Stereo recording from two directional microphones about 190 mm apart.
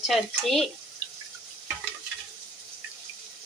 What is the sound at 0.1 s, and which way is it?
Speech, centre (ahead or behind).